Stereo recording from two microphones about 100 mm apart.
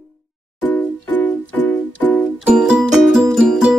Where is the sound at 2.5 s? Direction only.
10° right (ahead or behind).